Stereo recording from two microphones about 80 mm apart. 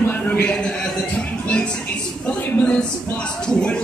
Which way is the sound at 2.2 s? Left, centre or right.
Centre.